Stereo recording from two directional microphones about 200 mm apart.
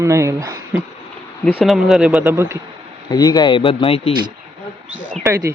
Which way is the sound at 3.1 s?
20° left (ahead or behind).